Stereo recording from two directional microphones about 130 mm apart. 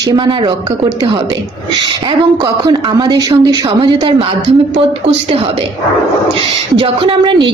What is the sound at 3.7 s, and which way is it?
Speech, 40° right (ahead or behind).